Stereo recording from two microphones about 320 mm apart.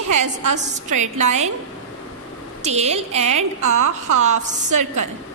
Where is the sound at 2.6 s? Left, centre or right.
Centre.